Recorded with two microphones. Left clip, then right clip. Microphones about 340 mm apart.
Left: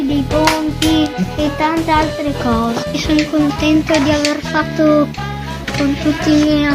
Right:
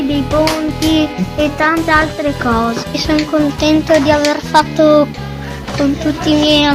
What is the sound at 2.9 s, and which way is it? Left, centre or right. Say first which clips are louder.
Speech: right 1 dB; right.